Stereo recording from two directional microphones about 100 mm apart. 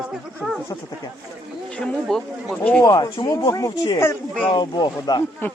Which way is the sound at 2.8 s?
45° left (ahead or behind).